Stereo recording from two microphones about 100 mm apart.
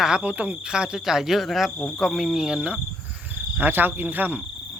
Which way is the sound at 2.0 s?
5° right (ahead or behind).